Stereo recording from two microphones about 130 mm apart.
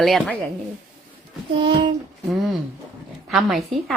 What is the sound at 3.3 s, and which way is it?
Speech, centre (ahead or behind).